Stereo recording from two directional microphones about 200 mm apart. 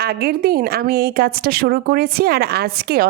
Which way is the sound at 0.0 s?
50° right (ahead or behind).